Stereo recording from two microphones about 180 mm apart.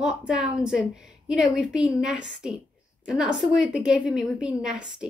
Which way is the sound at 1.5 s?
5° right (ahead or behind).